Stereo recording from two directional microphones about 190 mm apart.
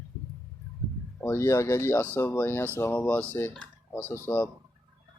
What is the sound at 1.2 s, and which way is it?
Speech, 15° left (ahead or behind).